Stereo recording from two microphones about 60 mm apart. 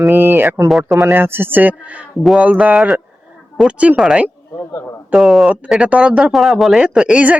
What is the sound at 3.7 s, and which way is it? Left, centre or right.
Speech, right.